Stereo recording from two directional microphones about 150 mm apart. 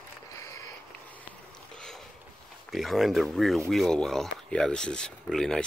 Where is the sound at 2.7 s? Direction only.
Centre (ahead or behind).